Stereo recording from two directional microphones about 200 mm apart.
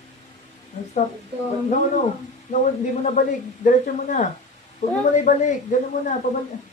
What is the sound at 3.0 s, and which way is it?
Speech, 40° left (ahead or behind).